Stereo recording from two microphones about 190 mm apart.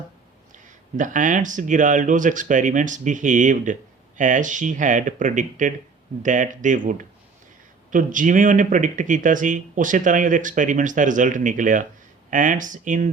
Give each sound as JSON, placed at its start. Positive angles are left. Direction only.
{"t": 0.5, "sound": "speech", "side_deg": -40}